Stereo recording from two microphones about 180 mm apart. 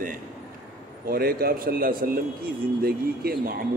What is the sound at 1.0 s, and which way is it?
A man's voice, 55° right (ahead or behind).